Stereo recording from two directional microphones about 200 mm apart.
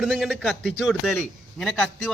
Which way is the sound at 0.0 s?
Centre (ahead or behind).